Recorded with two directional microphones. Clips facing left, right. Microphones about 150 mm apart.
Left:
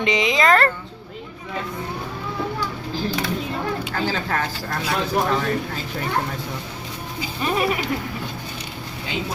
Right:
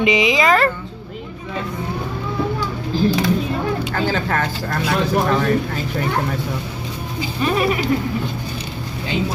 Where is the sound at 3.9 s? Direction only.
60° right (ahead or behind).